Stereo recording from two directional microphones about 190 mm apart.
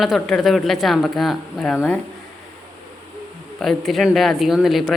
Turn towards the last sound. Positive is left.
turn(degrees=0)  # may be behind; listen again after turning